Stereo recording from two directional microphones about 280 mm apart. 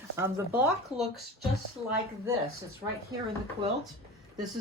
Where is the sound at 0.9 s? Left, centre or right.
Centre.